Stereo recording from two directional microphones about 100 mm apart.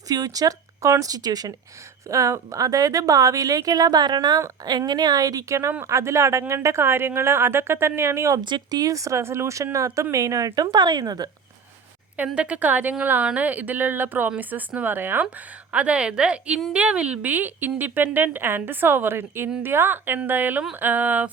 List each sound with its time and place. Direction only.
0.1 s a woman's voice: 40° right (ahead or behind)
8.4 s speech: 50° right (ahead or behind)
12.1 s a woman's voice: 10° right (ahead or behind)